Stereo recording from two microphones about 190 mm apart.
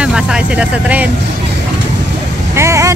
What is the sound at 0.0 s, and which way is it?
Speech, 5° right (ahead or behind).